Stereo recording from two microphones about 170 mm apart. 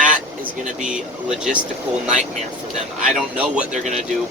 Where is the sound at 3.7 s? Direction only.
45° right (ahead or behind).